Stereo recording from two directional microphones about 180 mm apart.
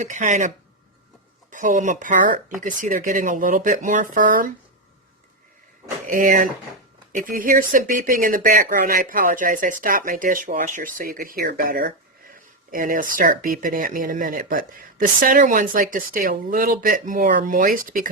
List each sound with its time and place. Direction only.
0.0 s speech: 45° right (ahead or behind)
6.1 s speech: 50° right (ahead or behind)